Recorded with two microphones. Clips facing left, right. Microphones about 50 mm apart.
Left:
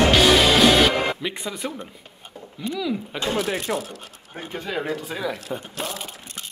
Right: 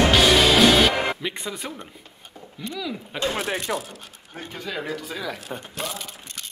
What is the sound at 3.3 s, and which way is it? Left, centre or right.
Speech, right.